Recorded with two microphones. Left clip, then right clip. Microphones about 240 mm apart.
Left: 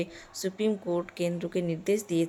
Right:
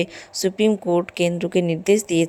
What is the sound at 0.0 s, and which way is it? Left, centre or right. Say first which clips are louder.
Speech: right 10 dB; right.